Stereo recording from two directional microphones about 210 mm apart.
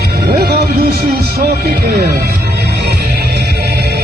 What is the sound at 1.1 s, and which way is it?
Music, 50° right (ahead or behind).